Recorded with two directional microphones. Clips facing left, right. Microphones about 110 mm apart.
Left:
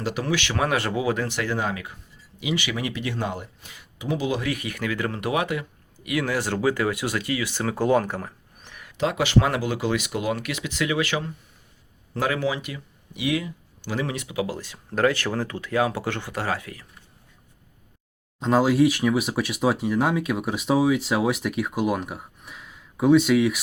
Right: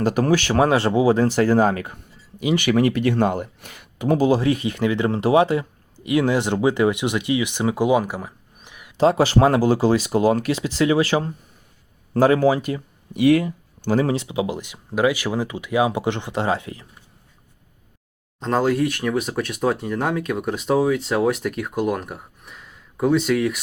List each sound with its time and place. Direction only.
0.0 s speech: 45° right (ahead or behind); by 8.9 s 15° right (ahead or behind)
9.0 s speech: 35° right (ahead or behind)
18.3 s speech: 5° left (ahead or behind)